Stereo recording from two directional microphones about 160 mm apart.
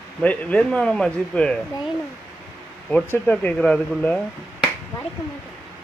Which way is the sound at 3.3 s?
5° left (ahead or behind).